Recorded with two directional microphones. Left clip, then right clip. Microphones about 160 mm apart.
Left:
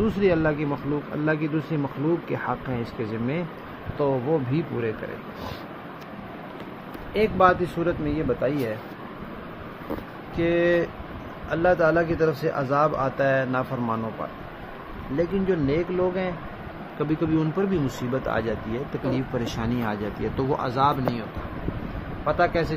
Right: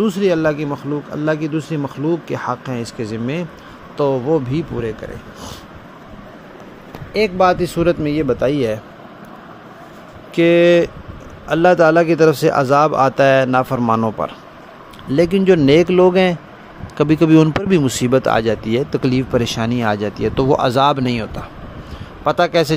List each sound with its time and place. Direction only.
0.0 s speech: 35° right (ahead or behind)
7.2 s speech: 50° right (ahead or behind)
7.8 s a man's voice: 90° right
10.3 s a man's voice: 75° right (ahead or behind)
15.1 s speech: 90° right